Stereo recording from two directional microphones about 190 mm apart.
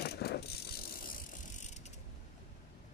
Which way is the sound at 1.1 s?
40° left (ahead or behind).